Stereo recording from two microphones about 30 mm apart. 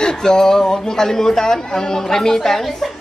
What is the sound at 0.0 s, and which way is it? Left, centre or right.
Speech, left.